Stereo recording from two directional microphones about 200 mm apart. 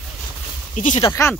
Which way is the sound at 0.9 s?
25° left (ahead or behind).